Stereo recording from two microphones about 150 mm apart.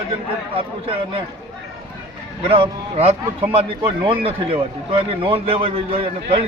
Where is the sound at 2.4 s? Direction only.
35° right (ahead or behind).